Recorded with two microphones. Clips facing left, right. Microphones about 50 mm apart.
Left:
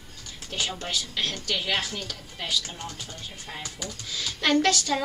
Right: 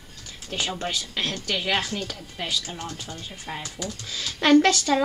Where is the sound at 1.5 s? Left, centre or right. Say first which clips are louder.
Right 4 dB; centre.